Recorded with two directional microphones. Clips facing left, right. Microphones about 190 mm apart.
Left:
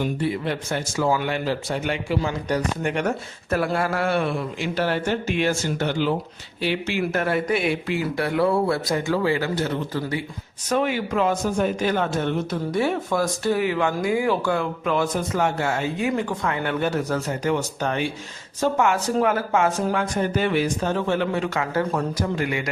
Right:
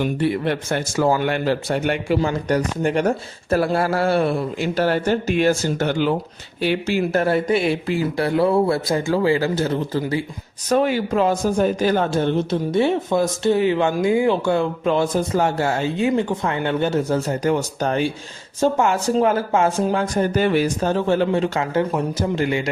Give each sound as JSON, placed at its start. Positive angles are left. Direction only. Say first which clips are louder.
{"t": 0.0, "sound": "speech", "louder": "right 4 dB", "side_deg": -70}
{"t": 1.0, "sound": "speech", "louder": "right 4 dB", "side_deg": -50}
{"t": 2.8, "sound": "a man's voice", "louder": "right 5 dB", "side_deg": -35}
{"t": 7.1, "sound": "a man's voice", "louder": "right 4 dB", "side_deg": -35}